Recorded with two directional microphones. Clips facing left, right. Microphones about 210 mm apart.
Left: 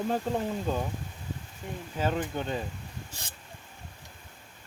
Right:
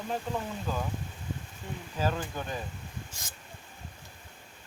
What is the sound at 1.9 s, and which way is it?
Speech, 25° left (ahead or behind).